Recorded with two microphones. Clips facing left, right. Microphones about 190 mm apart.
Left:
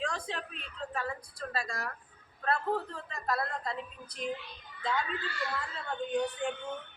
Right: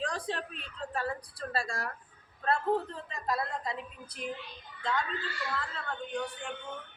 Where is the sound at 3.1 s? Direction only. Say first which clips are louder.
Even; 15° right (ahead or behind).